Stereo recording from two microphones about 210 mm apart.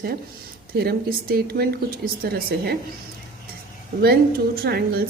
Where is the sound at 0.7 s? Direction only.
50° right (ahead or behind).